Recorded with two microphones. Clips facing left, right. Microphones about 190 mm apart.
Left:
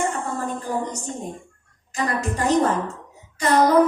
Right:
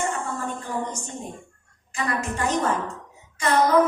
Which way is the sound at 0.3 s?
35° left (ahead or behind).